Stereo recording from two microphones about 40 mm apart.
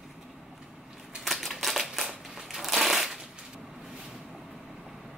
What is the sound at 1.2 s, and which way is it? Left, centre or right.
Typewriter, centre.